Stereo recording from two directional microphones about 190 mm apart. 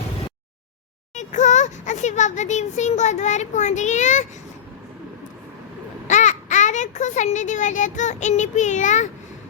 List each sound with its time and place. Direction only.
1.1 s speech: 40° left (ahead or behind)
6.1 s a child's voice: 40° left (ahead or behind)